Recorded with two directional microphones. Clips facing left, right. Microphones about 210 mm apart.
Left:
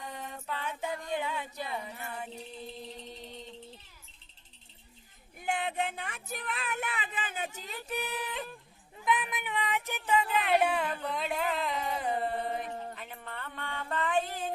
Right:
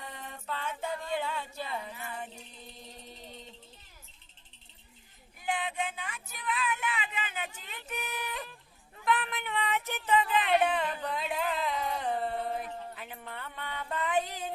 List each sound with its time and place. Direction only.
0.2 s music: 10° left (ahead or behind)
1.2 s female singing: 15° left (ahead or behind)
5.4 s child singing: 55° left (ahead or behind)
6.9 s music: 50° left (ahead or behind); by 8.4 s 30° left (ahead or behind)
9.0 s a sound: 15° left (ahead or behind); by 14.4 s 10° right (ahead or behind)